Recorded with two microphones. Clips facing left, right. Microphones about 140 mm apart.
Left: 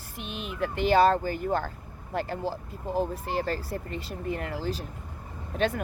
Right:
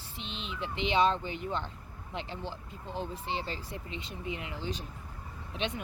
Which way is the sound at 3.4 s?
40° left (ahead or behind).